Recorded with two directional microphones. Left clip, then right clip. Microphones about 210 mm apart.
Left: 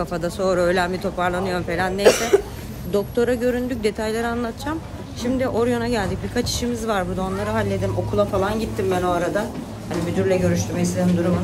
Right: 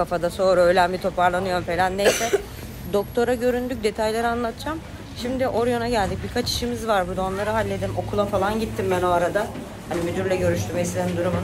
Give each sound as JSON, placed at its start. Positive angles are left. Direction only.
{"t": 0.0, "sound": "speech", "side_deg": 5}
{"t": 2.0, "sound": "speech", "side_deg": 45}
{"t": 2.9, "sound": "speech", "side_deg": 5}